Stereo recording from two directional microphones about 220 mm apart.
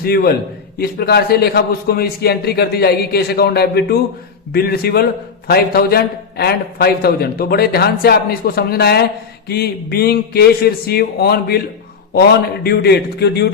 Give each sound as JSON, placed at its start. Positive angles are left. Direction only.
{"t": 0.0, "sound": "a man's voice", "side_deg": 45}
{"t": 12.6, "sound": "a man's voice", "side_deg": 45}